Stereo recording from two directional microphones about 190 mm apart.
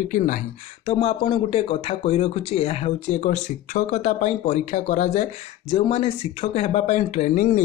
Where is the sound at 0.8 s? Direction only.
30° left (ahead or behind).